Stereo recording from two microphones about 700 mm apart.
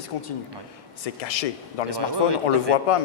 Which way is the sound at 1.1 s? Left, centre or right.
Left.